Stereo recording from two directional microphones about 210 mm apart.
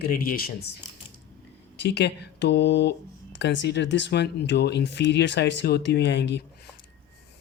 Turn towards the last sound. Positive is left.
turn(degrees=55)  # may be behind; listen again after turning